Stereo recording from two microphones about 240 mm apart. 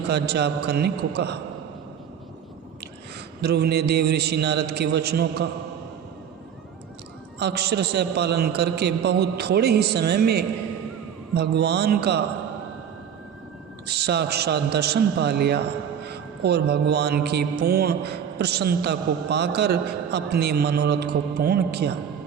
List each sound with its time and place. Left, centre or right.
0.1 s music: right
3.4 s music: right
7.3 s music: right
13.8 s music: right